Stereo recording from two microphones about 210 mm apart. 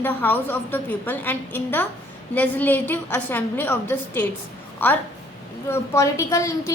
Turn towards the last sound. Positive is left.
turn(degrees=15)  # may be behind; listen again after turning